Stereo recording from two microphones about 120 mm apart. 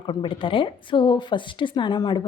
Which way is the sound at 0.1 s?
45° left (ahead or behind).